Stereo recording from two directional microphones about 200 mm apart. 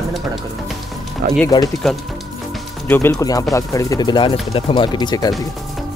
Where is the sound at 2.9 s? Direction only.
15° left (ahead or behind).